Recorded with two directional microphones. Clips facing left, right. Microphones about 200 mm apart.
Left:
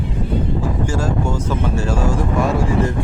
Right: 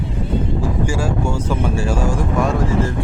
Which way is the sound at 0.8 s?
10° right (ahead or behind).